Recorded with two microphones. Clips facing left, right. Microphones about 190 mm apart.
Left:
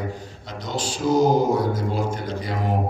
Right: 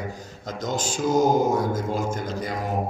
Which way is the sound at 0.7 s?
45° right (ahead or behind).